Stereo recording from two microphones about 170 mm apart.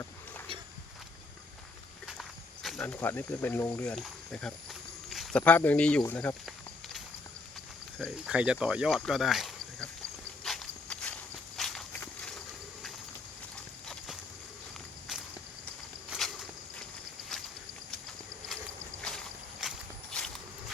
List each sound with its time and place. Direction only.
2.6 s speech: 5° left (ahead or behind)
4.3 s a sound: 5° left (ahead or behind)
5.4 s speech: 10° left (ahead or behind)
6.1 s snake: 10° left (ahead or behind)
7.9 s speech: 5° right (ahead or behind)
10.4 s walk: centre (ahead or behind)
16.0 s walk: centre (ahead or behind)
19.0 s boat: centre (ahead or behind)